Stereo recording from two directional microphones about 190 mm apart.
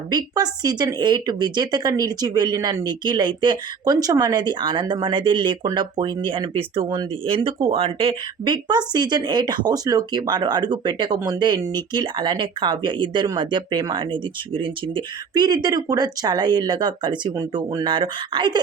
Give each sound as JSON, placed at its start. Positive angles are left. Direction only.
{"t": 0.1, "sound": "a woman's voice", "side_deg": -20}